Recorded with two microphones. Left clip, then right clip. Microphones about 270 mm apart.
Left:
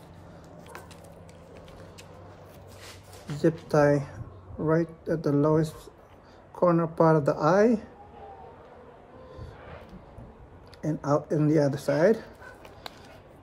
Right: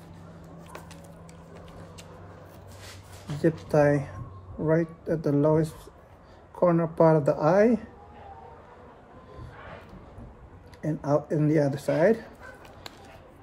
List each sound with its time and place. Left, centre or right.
3.3 s speech: centre
10.8 s speech: centre